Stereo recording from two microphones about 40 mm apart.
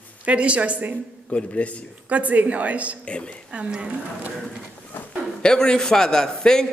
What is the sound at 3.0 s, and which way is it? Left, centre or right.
Speech, left.